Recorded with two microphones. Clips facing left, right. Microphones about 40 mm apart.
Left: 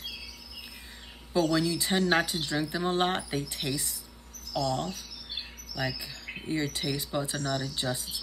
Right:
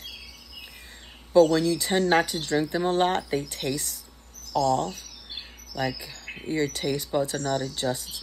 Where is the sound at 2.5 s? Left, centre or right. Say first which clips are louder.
Right 7 dB; right.